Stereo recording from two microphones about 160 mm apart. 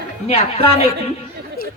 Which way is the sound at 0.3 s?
40° left (ahead or behind).